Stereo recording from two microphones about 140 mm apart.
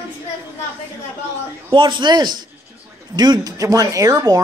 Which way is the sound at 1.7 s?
35° right (ahead or behind).